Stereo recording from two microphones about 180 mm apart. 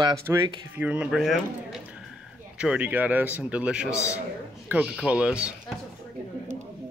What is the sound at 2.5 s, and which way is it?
Speech, 5° right (ahead or behind).